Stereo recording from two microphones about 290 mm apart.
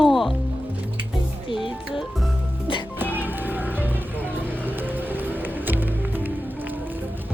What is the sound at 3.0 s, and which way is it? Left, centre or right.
Music, centre.